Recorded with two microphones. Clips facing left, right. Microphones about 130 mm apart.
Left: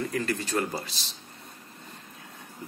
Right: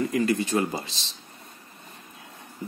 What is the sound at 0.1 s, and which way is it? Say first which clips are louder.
Speech: right 5 dB; 15° right (ahead or behind).